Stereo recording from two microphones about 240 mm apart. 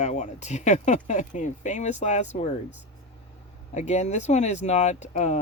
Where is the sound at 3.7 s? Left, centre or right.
Left.